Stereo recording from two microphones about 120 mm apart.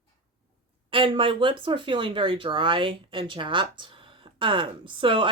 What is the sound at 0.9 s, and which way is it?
Speech, 45° right (ahead or behind).